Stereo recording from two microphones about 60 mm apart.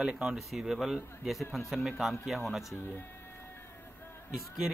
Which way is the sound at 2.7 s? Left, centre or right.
Left.